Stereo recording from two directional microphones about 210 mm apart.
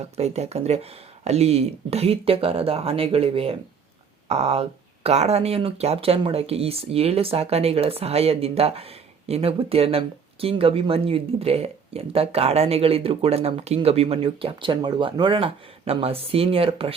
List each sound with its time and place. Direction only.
0.2 s speech: 30° right (ahead or behind)